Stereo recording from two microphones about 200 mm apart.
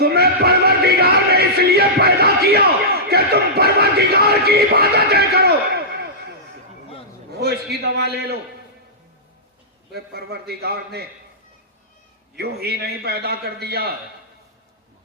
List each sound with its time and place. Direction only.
0.0 s music: 50° right (ahead or behind)
7.3 s a man's voice: 50° right (ahead or behind)
9.9 s a man's voice: 55° right (ahead or behind)
12.4 s a man's voice: 50° right (ahead or behind)